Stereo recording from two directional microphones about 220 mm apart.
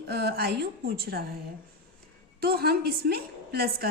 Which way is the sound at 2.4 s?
45° right (ahead or behind).